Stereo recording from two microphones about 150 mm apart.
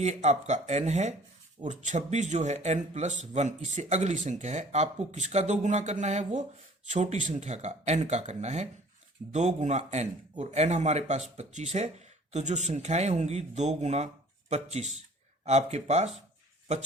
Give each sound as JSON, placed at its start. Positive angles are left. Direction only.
{"t": 0.0, "sound": "speech", "side_deg": -50}